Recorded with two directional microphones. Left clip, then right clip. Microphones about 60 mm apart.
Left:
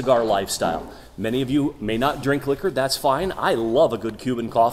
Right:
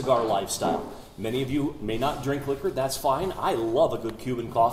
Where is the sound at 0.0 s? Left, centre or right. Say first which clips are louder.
Left 5 dB; left.